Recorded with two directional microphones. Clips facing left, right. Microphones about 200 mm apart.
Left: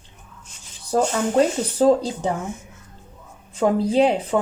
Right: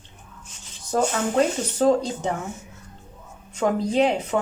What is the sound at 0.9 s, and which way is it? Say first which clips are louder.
A woman's voice: left 2 dB; 35° left (ahead or behind).